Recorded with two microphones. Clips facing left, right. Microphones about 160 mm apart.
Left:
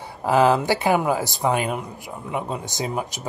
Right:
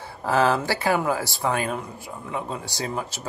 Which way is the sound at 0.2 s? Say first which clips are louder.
Left 3 dB; 15° left (ahead or behind).